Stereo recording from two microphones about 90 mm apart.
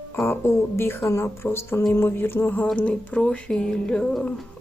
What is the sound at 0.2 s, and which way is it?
Speech, 30° left (ahead or behind).